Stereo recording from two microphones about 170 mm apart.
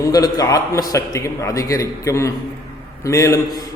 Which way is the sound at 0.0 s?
20° left (ahead or behind).